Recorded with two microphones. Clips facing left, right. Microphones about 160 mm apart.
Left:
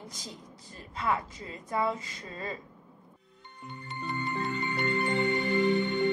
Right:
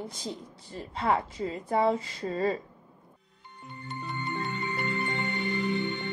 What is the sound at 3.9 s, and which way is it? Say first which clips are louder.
Music: left 1 dB; centre (ahead or behind).